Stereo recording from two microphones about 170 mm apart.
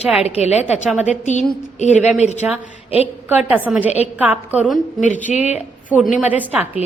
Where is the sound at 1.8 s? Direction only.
40° left (ahead or behind).